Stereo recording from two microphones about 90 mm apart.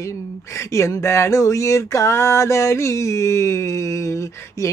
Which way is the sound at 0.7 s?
35° left (ahead or behind).